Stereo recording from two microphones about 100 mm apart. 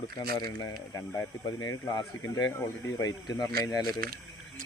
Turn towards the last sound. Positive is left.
turn(degrees=35)  # may be behind; listen again after turning